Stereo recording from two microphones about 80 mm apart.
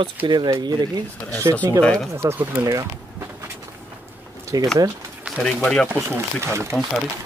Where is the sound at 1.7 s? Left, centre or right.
Centre.